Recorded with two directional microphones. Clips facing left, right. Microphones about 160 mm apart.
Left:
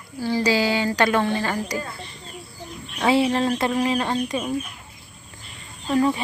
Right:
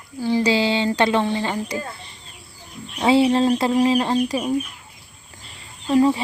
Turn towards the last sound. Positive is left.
turn(degrees=-25)  # may be behind; listen again after turning